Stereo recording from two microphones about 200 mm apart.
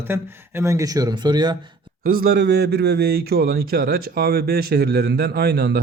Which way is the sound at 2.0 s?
50° right (ahead or behind).